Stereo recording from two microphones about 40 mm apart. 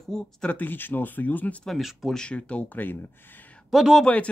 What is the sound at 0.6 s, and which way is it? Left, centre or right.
Speech, left.